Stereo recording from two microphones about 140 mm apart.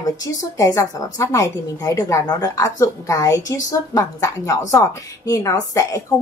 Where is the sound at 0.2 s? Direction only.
25° left (ahead or behind).